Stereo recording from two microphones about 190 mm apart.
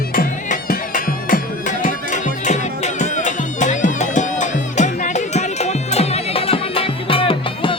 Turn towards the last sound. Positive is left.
turn(degrees=25)  # may be behind; listen again after turning